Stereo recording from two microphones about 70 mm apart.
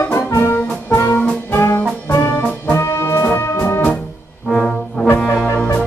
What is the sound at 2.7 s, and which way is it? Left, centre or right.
Brass instrument, left.